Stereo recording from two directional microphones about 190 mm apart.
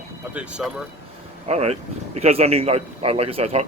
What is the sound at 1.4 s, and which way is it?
A man's voice, 35° right (ahead or behind).